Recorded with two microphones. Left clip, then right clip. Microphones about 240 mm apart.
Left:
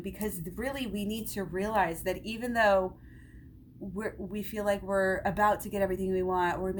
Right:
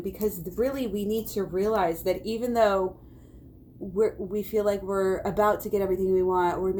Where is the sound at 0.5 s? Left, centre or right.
Left.